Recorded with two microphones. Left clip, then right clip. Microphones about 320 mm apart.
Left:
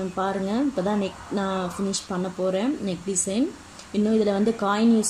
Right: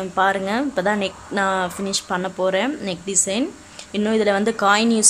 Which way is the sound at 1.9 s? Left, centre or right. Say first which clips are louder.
Right 6 dB; right.